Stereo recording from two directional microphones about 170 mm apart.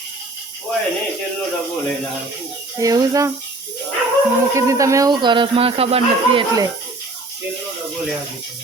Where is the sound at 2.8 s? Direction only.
20° right (ahead or behind).